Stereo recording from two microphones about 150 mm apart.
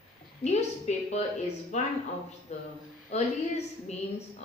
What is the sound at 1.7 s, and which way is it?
A woman's voice, 50° left (ahead or behind).